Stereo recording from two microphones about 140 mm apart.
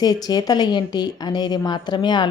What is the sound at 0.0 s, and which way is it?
A woman's voice, 30° left (ahead or behind).